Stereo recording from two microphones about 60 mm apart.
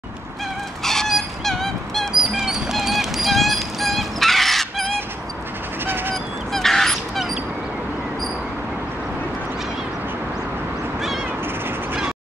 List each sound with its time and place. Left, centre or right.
0.8 s dog: centre
2.1 s music: centre
5.9 s goose: right
6.5 s fowl: centre